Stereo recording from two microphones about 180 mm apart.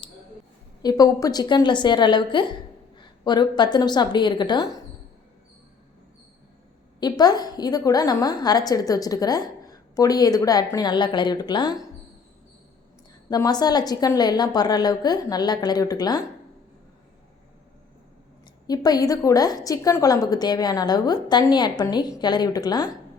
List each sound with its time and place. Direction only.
0.8 s a woman's voice: 20° left (ahead or behind)
7.0 s a woman's voice: 20° left (ahead or behind)
13.3 s a woman's voice: 20° left (ahead or behind)
18.7 s a woman's voice: 20° left (ahead or behind)